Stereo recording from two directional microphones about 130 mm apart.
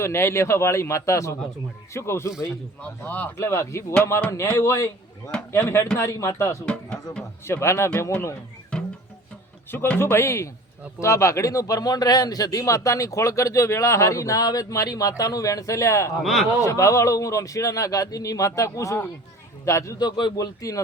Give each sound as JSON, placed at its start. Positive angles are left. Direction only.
{"t": 0.0, "sound": "speech", "side_deg": 20}
{"t": 6.7, "sound": "speech", "side_deg": 5}
{"t": 7.4, "sound": "speech", "side_deg": 20}
{"t": 8.7, "sound": "music", "side_deg": 5}
{"t": 9.7, "sound": "speech", "side_deg": 15}
{"t": 16.2, "sound": "a man's voice", "side_deg": 0}
{"t": 16.6, "sound": "speech", "side_deg": 25}